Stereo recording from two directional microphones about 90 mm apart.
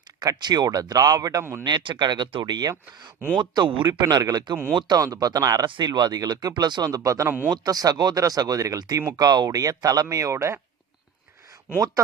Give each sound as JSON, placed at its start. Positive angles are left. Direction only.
{"t": 0.2, "sound": "speech", "side_deg": -55}
{"t": 1.6, "sound": "speech", "side_deg": -60}
{"t": 4.1, "sound": "speech", "side_deg": -45}
{"t": 4.7, "sound": "speech", "side_deg": -65}
{"t": 4.9, "sound": "speech", "side_deg": -45}
{"t": 5.6, "sound": "speech", "side_deg": -55}
{"t": 7.3, "sound": "speech", "side_deg": -25}
{"t": 7.5, "sound": "speech", "side_deg": -45}